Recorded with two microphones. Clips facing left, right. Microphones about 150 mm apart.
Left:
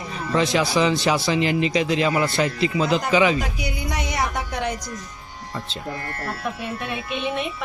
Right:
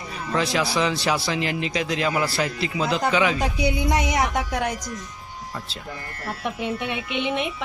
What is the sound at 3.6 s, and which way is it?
Music, 15° right (ahead or behind).